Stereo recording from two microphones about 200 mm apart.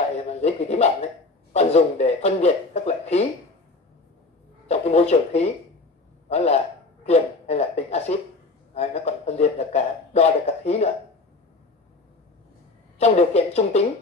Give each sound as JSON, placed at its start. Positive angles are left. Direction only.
{"t": 0.3, "sound": "a man's voice", "side_deg": 30}
{"t": 4.6, "sound": "a man's voice", "side_deg": 35}
{"t": 13.0, "sound": "a man's voice", "side_deg": 35}